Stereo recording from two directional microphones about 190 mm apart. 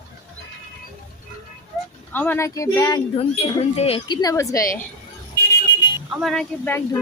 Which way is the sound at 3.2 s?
30° left (ahead or behind).